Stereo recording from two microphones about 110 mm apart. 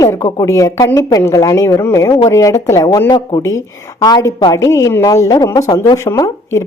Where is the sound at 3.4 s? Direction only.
30° left (ahead or behind).